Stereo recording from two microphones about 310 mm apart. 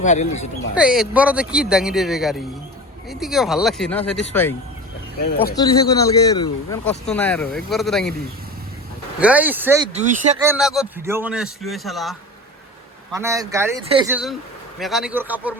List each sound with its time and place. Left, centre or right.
0.0 s speech: left
0.8 s a man's voice: centre
5.5 s a man's voice: centre
9.2 s a man's voice: centre
9.9 s speech: right
10.4 s a man's voice: centre
13.1 s a man's voice: centre